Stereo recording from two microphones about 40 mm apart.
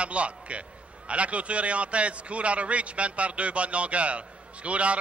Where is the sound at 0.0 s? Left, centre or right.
Right.